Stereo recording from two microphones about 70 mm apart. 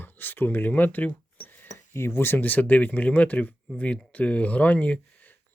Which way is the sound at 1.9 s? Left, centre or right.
Left.